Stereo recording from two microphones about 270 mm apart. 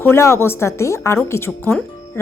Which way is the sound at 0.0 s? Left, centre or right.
Centre.